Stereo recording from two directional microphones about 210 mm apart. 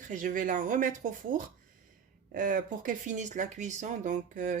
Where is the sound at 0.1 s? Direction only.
40° right (ahead or behind).